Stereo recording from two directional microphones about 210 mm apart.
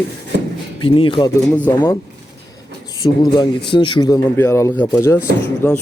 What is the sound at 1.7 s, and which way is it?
Speech, 15° left (ahead or behind).